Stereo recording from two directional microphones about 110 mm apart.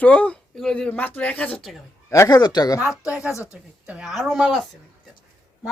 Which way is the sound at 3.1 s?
10° right (ahead or behind).